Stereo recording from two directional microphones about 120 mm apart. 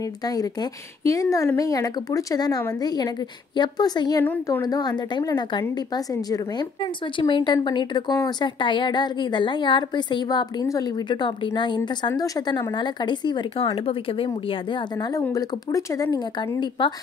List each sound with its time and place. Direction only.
0.2 s a woman's voice: 30° left (ahead or behind)
4.2 s a woman's voice: 15° left (ahead or behind)
4.6 s a woman's voice: 35° left (ahead or behind)
6.8 s a woman's voice: 45° left (ahead or behind)
15.3 s speech: 30° left (ahead or behind)
16.3 s a woman's voice: 40° left (ahead or behind)